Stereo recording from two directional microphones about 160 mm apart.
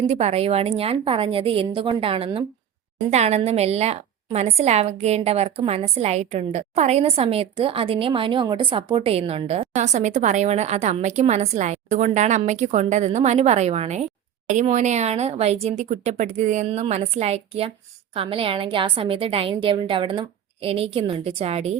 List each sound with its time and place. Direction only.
0.1 s a woman's voice: 45° right (ahead or behind)